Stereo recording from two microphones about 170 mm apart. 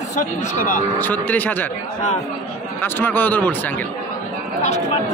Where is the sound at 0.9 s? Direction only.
10° left (ahead or behind).